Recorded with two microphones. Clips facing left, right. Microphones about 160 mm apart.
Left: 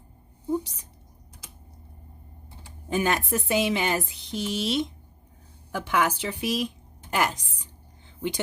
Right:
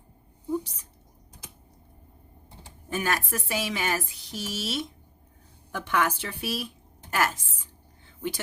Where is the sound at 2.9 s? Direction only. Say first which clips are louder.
Left 4 dB; 20° left (ahead or behind).